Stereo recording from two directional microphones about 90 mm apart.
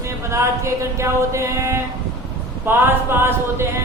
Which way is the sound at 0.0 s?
30° right (ahead or behind).